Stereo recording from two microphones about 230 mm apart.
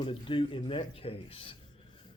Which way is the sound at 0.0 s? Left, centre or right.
Left.